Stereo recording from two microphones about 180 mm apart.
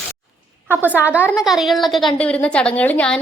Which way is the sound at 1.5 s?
Centre (ahead or behind).